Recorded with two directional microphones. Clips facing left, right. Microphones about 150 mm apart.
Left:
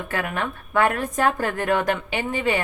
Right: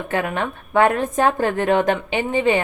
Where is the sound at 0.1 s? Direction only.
25° right (ahead or behind).